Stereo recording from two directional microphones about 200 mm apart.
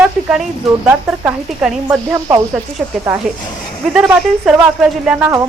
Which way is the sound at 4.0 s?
5° right (ahead or behind).